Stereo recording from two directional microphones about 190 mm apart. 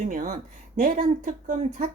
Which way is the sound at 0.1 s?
45° right (ahead or behind).